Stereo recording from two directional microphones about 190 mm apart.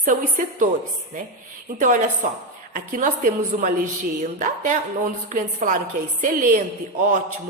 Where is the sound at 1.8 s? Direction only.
45° right (ahead or behind).